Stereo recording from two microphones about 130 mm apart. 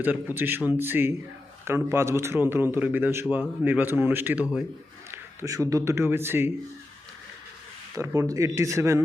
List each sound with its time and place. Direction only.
0.0 s a man's voice: 15° right (ahead or behind)
7.9 s speech: 20° right (ahead or behind)